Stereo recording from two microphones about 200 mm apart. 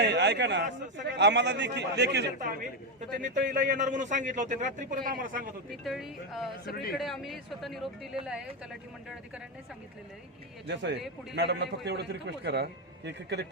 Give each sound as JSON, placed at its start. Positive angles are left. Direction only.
{"t": 0.0, "sound": "a sound", "side_deg": -60}
{"t": 1.0, "sound": "a man's voice", "side_deg": -60}
{"t": 3.2, "sound": "a man's voice", "side_deg": -40}
{"t": 5.7, "sound": "speech", "side_deg": 0}
{"t": 10.7, "sound": "a man's voice", "side_deg": -60}